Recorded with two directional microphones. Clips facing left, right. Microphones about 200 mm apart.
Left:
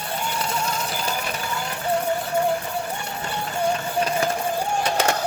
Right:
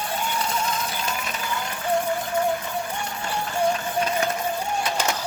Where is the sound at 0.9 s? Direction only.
35° left (ahead or behind).